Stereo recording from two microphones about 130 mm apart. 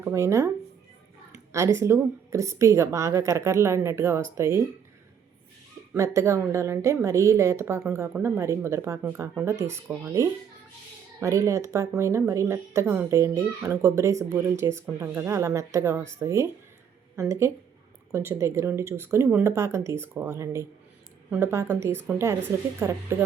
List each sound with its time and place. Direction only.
0.0 s a woman's voice: 20° right (ahead or behind)
6.0 s a woman's voice: 20° right (ahead or behind)